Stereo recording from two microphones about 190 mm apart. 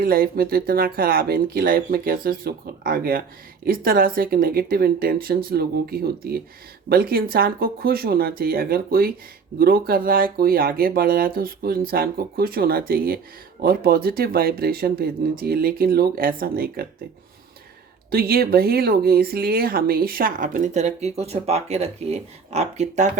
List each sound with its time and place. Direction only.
0.0 s speech: 50° right (ahead or behind)
18.1 s speech: 55° right (ahead or behind); by 23.1 s 40° right (ahead or behind)